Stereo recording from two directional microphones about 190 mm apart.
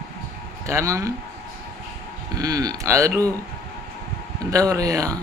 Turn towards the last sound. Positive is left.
turn(degrees=-20)  # may be behind; listen again after turning